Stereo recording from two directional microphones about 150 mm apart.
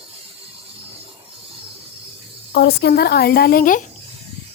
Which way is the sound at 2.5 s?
90° left.